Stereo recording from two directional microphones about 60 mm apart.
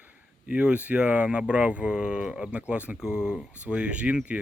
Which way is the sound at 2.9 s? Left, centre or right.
Centre.